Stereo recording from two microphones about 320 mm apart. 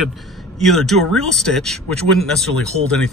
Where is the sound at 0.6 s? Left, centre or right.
Centre.